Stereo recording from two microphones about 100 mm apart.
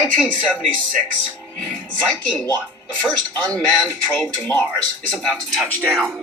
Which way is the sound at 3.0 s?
10° left (ahead or behind).